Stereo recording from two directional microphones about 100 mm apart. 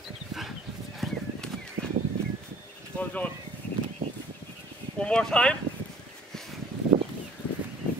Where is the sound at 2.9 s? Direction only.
15° left (ahead or behind).